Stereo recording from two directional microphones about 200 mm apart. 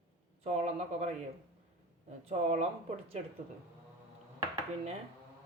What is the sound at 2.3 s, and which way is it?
Speech, 35° right (ahead or behind).